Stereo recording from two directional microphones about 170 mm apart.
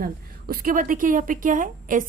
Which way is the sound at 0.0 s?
60° right (ahead or behind).